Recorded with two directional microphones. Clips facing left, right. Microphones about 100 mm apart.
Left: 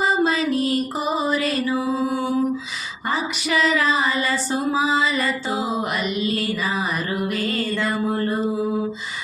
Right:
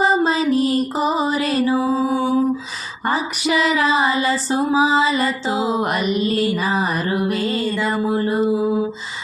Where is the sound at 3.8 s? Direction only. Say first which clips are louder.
Right 3 dB; 35° right (ahead or behind).